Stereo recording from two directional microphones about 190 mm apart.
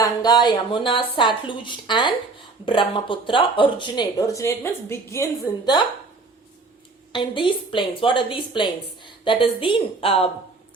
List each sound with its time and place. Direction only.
0.0 s a woman's voice: 20° left (ahead or behind)
7.1 s a woman's voice: 25° left (ahead or behind)